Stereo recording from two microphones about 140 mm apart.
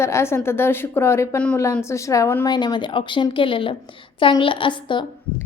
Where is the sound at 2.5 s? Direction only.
30° left (ahead or behind).